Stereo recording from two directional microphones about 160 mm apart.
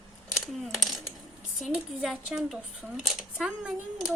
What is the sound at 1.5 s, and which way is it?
Speech, centre (ahead or behind).